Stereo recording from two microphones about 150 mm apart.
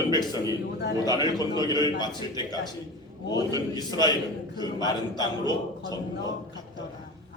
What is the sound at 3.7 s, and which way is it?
A man's voice, 25° left (ahead or behind).